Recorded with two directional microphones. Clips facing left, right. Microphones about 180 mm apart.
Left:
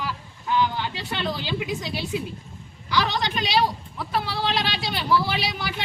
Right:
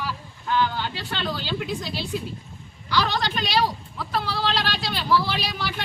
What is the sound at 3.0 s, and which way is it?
Speech, 15° left (ahead or behind).